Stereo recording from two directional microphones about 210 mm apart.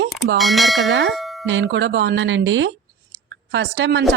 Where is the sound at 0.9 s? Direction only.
55° right (ahead or behind).